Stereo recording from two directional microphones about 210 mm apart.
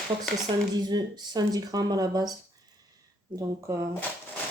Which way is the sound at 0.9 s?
20° right (ahead or behind).